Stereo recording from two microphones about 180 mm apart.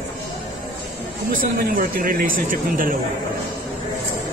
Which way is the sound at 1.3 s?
50° right (ahead or behind).